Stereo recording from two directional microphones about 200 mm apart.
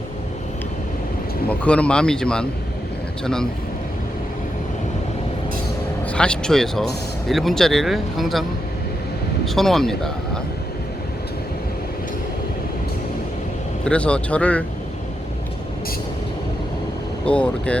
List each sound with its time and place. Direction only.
1.5 s speech: 5° left (ahead or behind)
6.1 s speech: 5° left (ahead or behind)
9.6 s speech: centre (ahead or behind)
13.8 s speech: 5° left (ahead or behind)
17.2 s speech: 5° left (ahead or behind)